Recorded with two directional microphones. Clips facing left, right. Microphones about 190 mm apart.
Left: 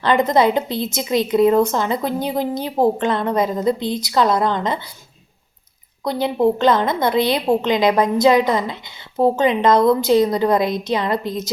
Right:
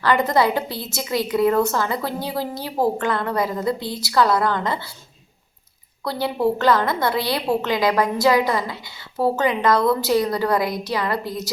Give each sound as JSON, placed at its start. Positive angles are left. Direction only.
{"t": 0.0, "sound": "a woman's voice", "side_deg": 20}
{"t": 6.1, "sound": "a woman's voice", "side_deg": 20}